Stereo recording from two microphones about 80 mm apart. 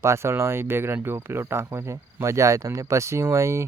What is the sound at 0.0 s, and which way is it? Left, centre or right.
Speech, right.